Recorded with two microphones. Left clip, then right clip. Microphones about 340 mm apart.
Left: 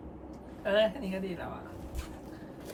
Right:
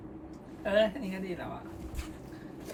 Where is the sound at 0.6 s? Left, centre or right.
Centre.